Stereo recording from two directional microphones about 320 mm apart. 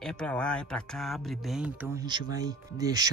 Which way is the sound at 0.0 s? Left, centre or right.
Centre.